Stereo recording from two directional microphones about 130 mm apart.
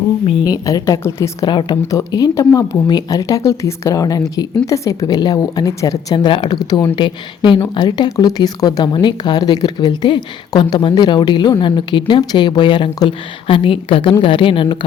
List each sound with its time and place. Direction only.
0.4 s speech: 30° left (ahead or behind)
1.5 s speech: 35° left (ahead or behind)
6.5 s speech: 30° left (ahead or behind)